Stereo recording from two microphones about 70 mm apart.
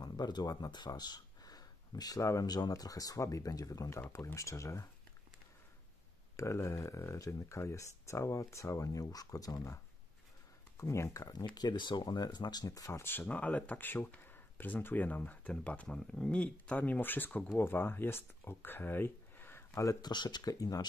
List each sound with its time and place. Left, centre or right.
0.0 s speech: left
2.4 s speech: left
4.4 s speech: left
6.3 s speech: left
10.8 s speech: left
11.2 s speech: left
13.0 s speech: left
19.7 s speech: left
20.0 s speech: left